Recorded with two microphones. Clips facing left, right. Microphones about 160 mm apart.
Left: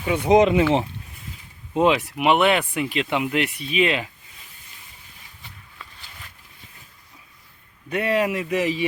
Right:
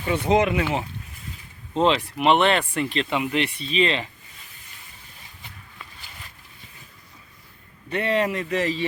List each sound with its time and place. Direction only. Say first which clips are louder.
0.0 s speech: left 4 dB; 10° left (ahead or behind)
1.7 s speech: left 2 dB; 10° left (ahead or behind)
7.9 s speech: left 1 dB; 10° left (ahead or behind)